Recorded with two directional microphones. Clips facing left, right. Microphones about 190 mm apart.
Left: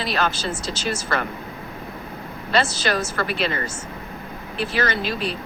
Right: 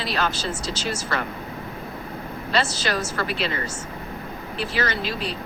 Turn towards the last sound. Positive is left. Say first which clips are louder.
# left 2 dB
turn(degrees=55)  # may be behind; listen again after turning